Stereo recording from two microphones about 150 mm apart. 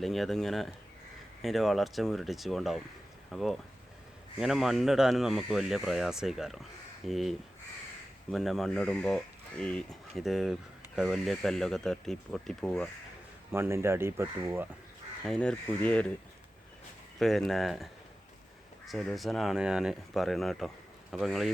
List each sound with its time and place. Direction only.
0.0 s speech: centre (ahead or behind)
13.5 s speech: 15° right (ahead or behind)
15.3 s speech: 5° left (ahead or behind)
17.2 s speech: centre (ahead or behind)
18.9 s speech: centre (ahead or behind)